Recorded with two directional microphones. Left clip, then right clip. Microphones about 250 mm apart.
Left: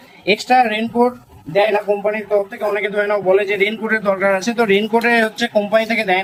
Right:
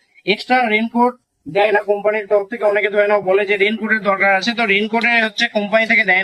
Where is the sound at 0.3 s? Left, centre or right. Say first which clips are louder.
Left 2 dB; left.